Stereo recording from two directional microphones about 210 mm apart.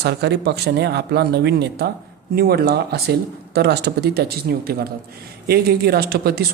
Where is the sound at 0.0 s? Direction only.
55° right (ahead or behind).